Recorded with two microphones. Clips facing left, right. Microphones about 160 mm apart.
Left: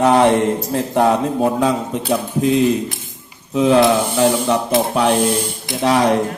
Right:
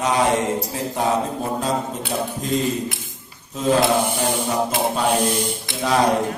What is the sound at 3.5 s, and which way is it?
A man's voice, 70° left (ahead or behind).